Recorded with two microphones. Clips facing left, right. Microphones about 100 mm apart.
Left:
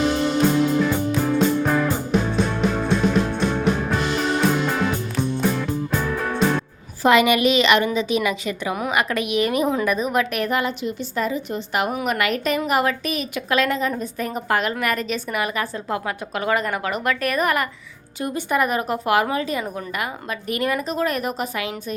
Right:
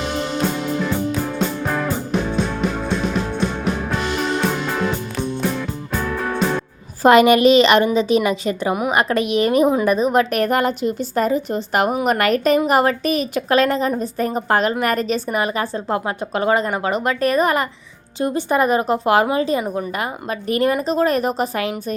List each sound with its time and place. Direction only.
1.2 s music: centre (ahead or behind)
7.0 s a woman's voice: 40° right (ahead or behind)